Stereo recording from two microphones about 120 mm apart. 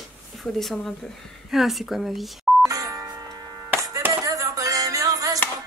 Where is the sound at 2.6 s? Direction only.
30° right (ahead or behind).